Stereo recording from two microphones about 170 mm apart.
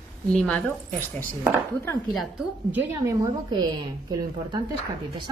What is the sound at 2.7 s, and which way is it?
Speech, 15° right (ahead or behind).